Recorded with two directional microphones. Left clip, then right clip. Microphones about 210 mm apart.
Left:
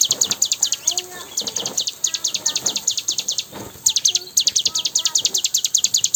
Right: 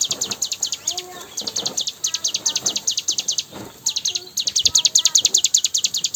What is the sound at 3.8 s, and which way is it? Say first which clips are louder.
Bird: left 5 dB; 30° left (ahead or behind).